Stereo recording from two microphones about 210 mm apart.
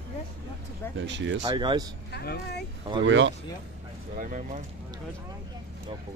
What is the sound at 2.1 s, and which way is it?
Speech, 50° left (ahead or behind).